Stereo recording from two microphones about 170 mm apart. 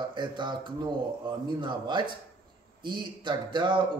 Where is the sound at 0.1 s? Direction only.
25° right (ahead or behind).